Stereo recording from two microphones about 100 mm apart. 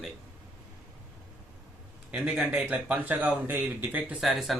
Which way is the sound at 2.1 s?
10° right (ahead or behind).